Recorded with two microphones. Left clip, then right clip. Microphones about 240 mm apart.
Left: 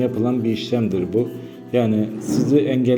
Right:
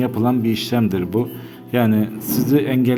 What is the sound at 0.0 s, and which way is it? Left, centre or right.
A man's voice, right.